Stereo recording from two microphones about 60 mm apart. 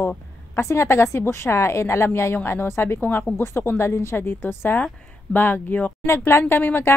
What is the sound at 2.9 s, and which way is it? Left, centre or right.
Speech, left.